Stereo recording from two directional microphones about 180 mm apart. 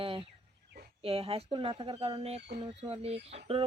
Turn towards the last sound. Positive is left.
turn(degrees=-35)  # may be behind; listen again after turning